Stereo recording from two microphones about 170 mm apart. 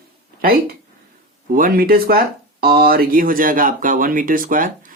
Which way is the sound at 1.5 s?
60° right (ahead or behind).